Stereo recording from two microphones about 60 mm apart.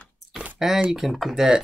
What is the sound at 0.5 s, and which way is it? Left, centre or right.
Speech, centre.